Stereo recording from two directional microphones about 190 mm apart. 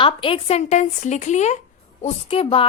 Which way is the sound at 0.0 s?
25° left (ahead or behind).